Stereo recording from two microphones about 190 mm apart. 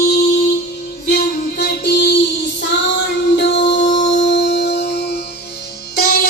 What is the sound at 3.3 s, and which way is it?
Music, 65° left (ahead or behind).